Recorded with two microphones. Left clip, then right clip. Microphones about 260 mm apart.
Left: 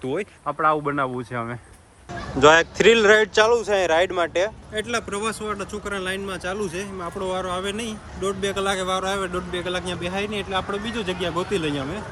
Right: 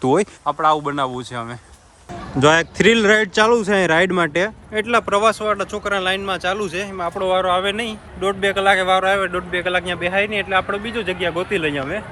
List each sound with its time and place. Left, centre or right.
0.0 s a man's voice: right
0.4 s a man's voice: centre
2.4 s a man's voice: right
4.9 s speech: centre